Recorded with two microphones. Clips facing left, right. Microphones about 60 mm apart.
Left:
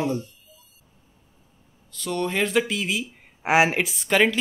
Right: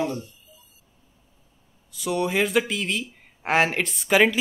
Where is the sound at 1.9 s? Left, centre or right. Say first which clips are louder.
Right 2 dB; centre.